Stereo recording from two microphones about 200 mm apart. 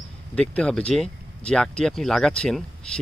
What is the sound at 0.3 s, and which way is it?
Speech, 5° left (ahead or behind).